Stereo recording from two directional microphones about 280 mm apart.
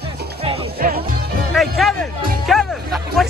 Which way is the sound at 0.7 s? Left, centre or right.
Right.